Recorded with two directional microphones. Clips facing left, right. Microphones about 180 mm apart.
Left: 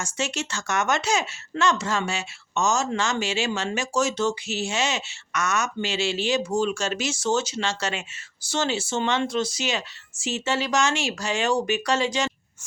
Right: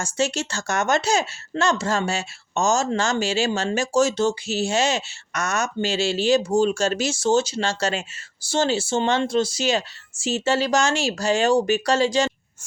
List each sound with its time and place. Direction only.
0.0 s speech: 35° right (ahead or behind)